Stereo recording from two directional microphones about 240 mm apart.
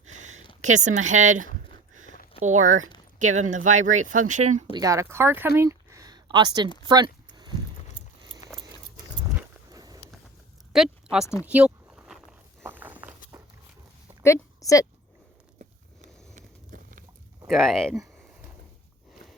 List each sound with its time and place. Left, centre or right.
0.1 s a sound: right
0.6 s speech: right
1.9 s a sound: right
2.4 s speech: right
4.7 s speech: centre
6.8 s a sound: centre
9.3 s walk: centre
10.7 s speech: centre
11.4 s walk: centre
14.6 s speech: centre
16.3 s a sound: right
17.4 s speech: centre